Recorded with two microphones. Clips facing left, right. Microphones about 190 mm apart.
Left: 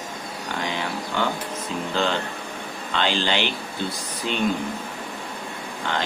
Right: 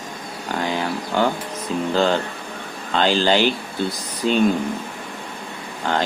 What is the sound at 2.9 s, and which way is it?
Speech, 40° right (ahead or behind).